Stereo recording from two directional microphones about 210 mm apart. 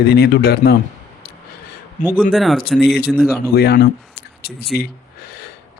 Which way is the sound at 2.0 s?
35° left (ahead or behind).